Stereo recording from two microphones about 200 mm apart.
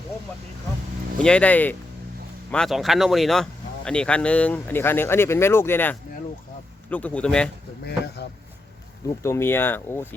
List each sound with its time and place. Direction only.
1.2 s speech: 5° left (ahead or behind)
7.9 s speech: 55° left (ahead or behind)
9.0 s speech: 15° left (ahead or behind)